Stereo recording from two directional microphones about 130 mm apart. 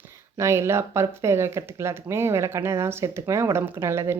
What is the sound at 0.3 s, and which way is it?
Speech, 20° right (ahead or behind).